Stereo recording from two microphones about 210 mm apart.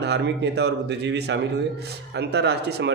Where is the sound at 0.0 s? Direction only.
55° right (ahead or behind).